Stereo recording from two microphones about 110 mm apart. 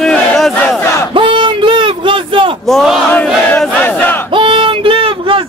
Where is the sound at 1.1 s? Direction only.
50° right (ahead or behind).